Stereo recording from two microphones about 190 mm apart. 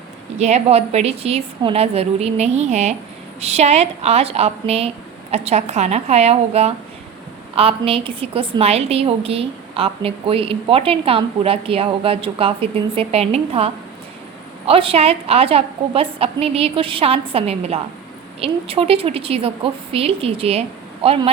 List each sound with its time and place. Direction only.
0.3 s a woman's voice: 35° right (ahead or behind)
14.7 s a woman's voice: 30° right (ahead or behind)